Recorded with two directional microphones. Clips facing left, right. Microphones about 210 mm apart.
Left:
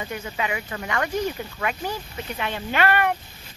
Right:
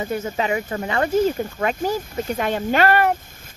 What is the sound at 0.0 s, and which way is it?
Speech, 40° right (ahead or behind).